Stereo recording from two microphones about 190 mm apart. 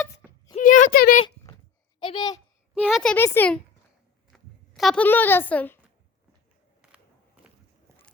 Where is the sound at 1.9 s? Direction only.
25° left (ahead or behind).